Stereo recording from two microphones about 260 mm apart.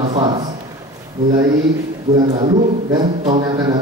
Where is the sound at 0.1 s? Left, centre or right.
Centre.